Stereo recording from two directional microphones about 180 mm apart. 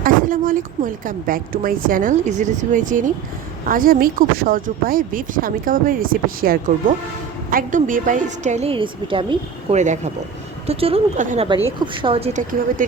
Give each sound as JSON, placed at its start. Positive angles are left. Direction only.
{"t": 0.0, "sound": "a woman's voice", "side_deg": -50}
{"t": 9.7, "sound": "a woman's voice", "side_deg": -40}